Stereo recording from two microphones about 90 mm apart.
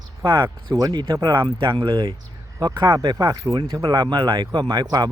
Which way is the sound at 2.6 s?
55° right (ahead or behind).